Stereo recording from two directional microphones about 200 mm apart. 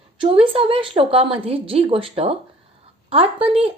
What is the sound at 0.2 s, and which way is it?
A woman's voice, 25° right (ahead or behind).